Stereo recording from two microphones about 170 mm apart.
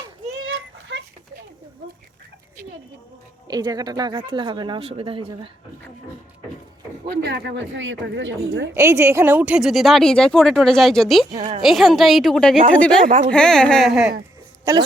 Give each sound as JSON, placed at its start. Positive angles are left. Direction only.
{"t": 3.5, "sound": "speech", "side_deg": -20}
{"t": 7.2, "sound": "a woman's voice", "side_deg": -80}
{"t": 8.7, "sound": "speech", "side_deg": -15}
{"t": 11.3, "sound": "a woman's voice", "side_deg": -35}
{"t": 11.6, "sound": "speech", "side_deg": 0}
{"t": 13.1, "sound": "speech", "side_deg": -50}
{"t": 13.3, "sound": "speech", "side_deg": 5}